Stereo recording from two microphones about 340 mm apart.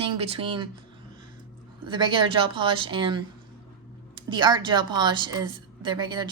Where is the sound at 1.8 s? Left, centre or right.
Centre.